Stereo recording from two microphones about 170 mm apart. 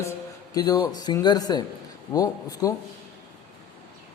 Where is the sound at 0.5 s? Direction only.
25° left (ahead or behind).